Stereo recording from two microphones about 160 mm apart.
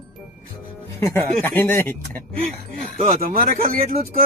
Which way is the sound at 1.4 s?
15° left (ahead or behind).